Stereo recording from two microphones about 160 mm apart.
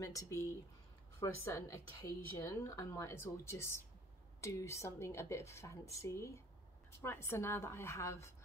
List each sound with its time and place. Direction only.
0.0 s a woman's voice: 20° left (ahead or behind)